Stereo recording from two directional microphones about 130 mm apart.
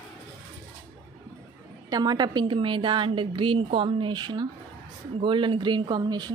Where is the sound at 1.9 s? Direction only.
30° right (ahead or behind).